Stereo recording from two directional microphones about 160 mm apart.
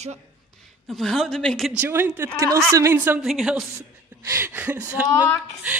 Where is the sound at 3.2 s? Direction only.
Centre (ahead or behind).